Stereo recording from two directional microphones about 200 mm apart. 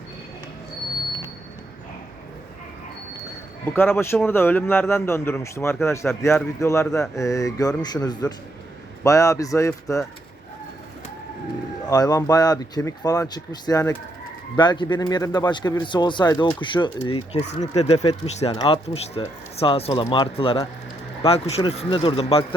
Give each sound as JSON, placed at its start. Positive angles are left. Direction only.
{"t": 3.7, "sound": "speech", "side_deg": 10}
{"t": 11.9, "sound": "speech", "side_deg": 20}